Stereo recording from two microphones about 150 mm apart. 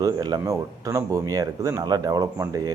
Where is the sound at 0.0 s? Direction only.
25° right (ahead or behind).